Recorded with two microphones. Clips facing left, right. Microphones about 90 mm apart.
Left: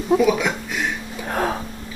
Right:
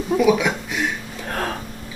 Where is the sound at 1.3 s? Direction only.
10° left (ahead or behind).